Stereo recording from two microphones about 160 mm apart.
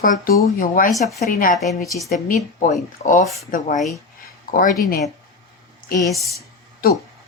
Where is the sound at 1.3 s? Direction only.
55° left (ahead or behind).